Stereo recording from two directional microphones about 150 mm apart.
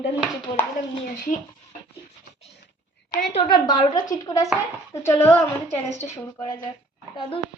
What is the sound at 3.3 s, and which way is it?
A woman's voice, 30° left (ahead or behind).